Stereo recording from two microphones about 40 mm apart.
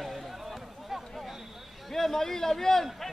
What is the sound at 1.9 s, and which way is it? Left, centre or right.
Speech, centre.